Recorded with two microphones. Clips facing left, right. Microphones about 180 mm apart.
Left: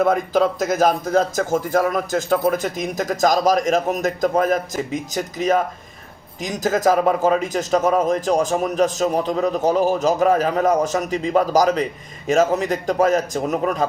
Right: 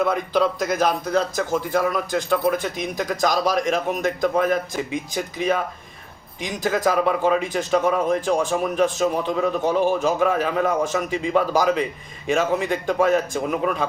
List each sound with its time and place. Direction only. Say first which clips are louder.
0.0 s a man's voice: left 3 dB; 45° left (ahead or behind)